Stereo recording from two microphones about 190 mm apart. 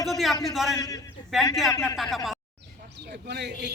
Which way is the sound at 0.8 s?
20° left (ahead or behind).